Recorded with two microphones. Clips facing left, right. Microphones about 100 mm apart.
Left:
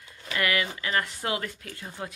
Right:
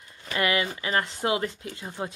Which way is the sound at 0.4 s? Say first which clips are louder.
Right 2 dB; 25° right (ahead or behind).